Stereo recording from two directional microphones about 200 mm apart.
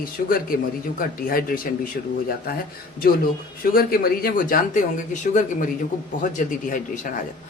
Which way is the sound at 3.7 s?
50° left (ahead or behind).